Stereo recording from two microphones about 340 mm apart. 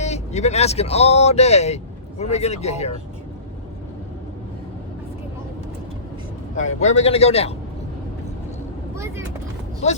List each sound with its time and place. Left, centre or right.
0.0 s speech: centre
6.6 s a man's voice: centre
9.8 s speech: centre